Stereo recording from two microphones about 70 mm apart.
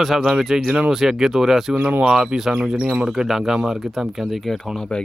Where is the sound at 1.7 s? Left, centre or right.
Centre.